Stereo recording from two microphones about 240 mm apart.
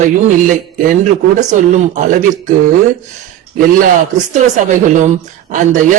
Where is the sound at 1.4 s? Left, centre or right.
Right.